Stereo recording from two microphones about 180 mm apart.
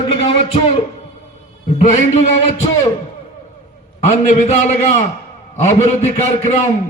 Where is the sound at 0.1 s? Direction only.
30° left (ahead or behind).